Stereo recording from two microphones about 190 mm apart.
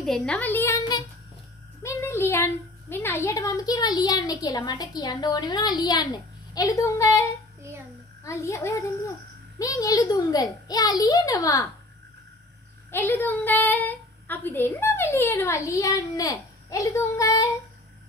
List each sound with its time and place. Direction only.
0.0 s a woman's voice: centre (ahead or behind); by 11.6 s 20° left (ahead or behind)
12.9 s a woman's voice: 10° left (ahead or behind)